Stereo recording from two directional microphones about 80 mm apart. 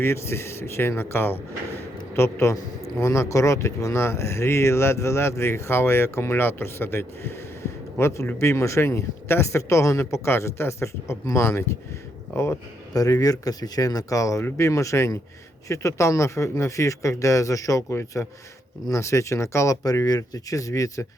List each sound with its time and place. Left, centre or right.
0.0 s speech: left
12.9 s speech: left